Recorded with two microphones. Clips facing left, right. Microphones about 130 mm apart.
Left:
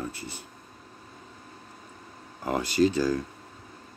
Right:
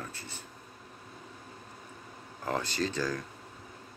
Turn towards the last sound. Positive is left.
turn(degrees=10)  # may be behind; listen again after turning